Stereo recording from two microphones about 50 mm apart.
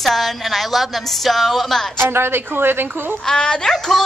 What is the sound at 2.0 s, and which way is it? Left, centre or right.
Speech, right.